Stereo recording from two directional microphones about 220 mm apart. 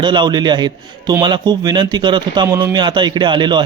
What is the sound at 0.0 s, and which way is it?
A man's voice, 20° right (ahead or behind).